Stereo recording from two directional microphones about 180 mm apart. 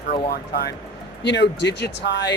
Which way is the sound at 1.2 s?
75° left (ahead or behind).